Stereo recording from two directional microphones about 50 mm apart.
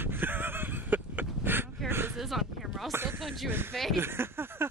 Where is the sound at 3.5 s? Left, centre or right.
Right.